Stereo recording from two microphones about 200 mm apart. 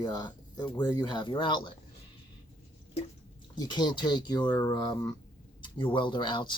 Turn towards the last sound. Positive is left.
turn(degrees=25)  # may be behind; listen again after turning